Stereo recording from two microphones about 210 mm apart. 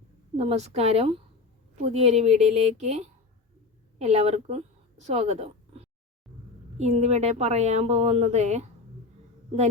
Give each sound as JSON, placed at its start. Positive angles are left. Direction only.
{"t": 0.3, "sound": "speech", "side_deg": -30}